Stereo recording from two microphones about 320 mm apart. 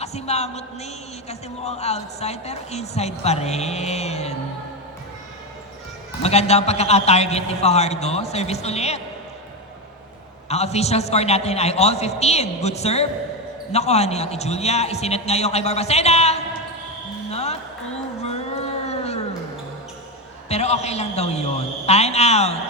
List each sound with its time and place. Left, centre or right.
0.0 s a woman's voice: centre
6.2 s a woman's voice: centre
10.5 s a woman's voice: centre
17.3 s a sound: centre
20.5 s a woman's voice: centre